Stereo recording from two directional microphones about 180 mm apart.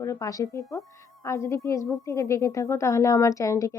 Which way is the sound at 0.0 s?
20° left (ahead or behind).